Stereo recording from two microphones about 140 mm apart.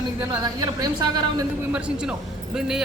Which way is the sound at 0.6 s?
30° right (ahead or behind).